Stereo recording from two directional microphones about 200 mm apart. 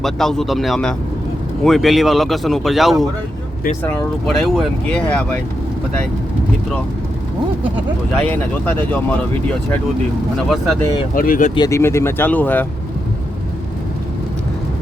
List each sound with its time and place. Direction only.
0.0 s speech: centre (ahead or behind)
4.4 s speech: centre (ahead or behind)
8.1 s speech: 5° left (ahead or behind)
10.3 s speech: centre (ahead or behind)
11.1 s speech: 45° left (ahead or behind)
11.5 s speech: 15° left (ahead or behind)